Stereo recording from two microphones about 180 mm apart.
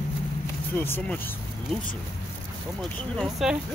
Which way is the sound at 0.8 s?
10° left (ahead or behind).